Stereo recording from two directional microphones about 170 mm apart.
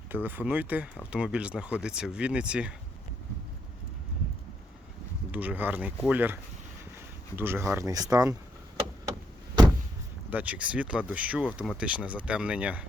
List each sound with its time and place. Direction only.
0.1 s speech: 10° right (ahead or behind)
5.3 s speech: 10° right (ahead or behind)
10.2 s speech: 10° right (ahead or behind)